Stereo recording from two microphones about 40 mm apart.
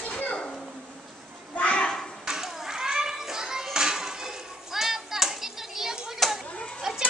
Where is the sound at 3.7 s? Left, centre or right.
Centre.